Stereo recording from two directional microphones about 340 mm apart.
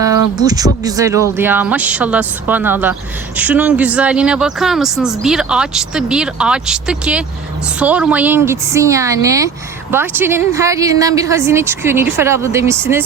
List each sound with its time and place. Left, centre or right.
0.0 s speech: centre